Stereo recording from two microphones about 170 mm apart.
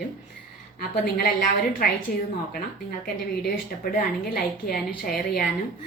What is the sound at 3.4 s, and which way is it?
A woman's voice, 60° left (ahead or behind).